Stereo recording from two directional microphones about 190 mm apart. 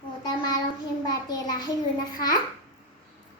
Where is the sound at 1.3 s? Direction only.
20° left (ahead or behind).